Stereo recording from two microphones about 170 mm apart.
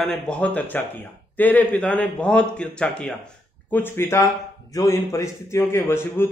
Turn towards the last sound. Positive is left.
turn(degrees=15)  # may be behind; listen again after turning